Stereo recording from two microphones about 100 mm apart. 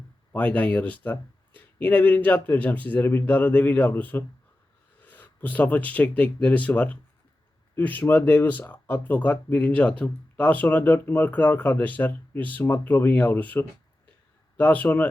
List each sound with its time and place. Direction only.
0.3 s speech: 15° left (ahead or behind)